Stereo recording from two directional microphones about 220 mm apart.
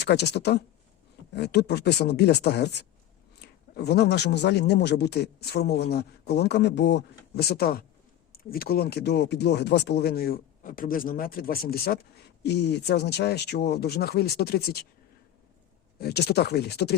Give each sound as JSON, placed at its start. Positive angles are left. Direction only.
{"t": 0.0, "sound": "speech", "side_deg": 50}
{"t": 16.0, "sound": "speech", "side_deg": 45}